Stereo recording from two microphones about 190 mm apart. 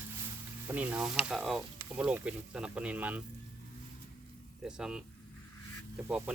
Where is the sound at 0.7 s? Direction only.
10° right (ahead or behind).